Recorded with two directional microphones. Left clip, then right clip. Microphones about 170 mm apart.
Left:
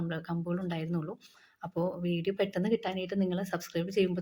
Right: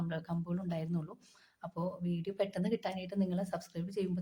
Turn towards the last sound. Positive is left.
turn(degrees=15)  # may be behind; listen again after turning